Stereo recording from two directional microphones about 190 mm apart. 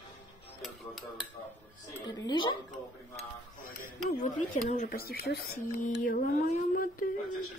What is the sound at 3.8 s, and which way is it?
Speech, 40° left (ahead or behind).